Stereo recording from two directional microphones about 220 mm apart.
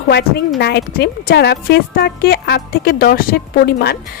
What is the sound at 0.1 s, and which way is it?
A woman's voice, 50° left (ahead or behind).